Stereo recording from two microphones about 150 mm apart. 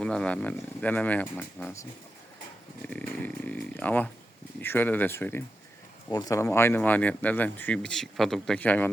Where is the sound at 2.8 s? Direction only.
10° left (ahead or behind).